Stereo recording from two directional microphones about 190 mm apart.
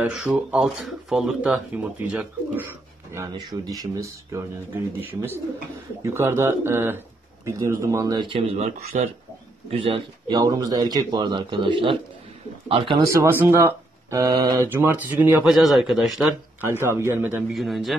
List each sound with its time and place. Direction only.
0.0 s speech: 5° right (ahead or behind); by 13.0 s 30° right (ahead or behind)
13.1 s speech: 10° right (ahead or behind)